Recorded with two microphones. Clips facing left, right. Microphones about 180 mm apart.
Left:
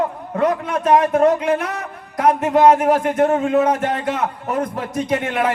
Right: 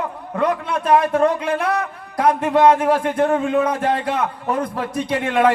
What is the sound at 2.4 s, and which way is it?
A man's voice, 30° left (ahead or behind).